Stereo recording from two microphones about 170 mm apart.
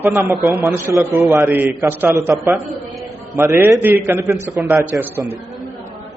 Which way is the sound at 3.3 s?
15° right (ahead or behind).